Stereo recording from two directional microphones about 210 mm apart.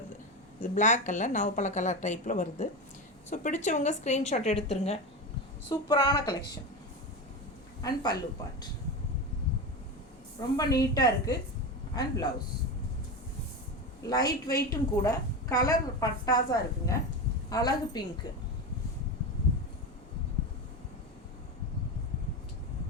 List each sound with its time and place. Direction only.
0.6 s a woman's voice: 35° left (ahead or behind)
5.6 s a woman's voice: 20° left (ahead or behind)
7.8 s a woman's voice: 15° left (ahead or behind)
10.6 s a woman's voice: 15° left (ahead or behind)
14.1 s a woman's voice: 20° left (ahead or behind)